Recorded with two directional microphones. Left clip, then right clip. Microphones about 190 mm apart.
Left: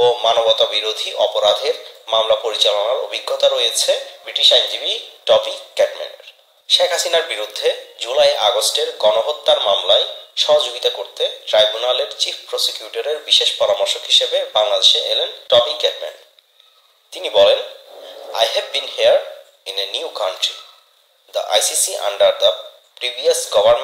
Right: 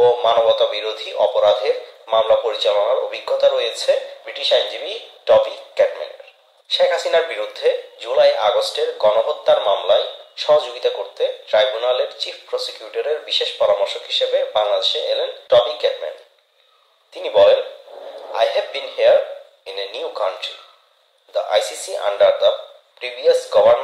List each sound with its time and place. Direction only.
0.0 s speech: 30° left (ahead or behind)
17.1 s speech: 30° left (ahead or behind)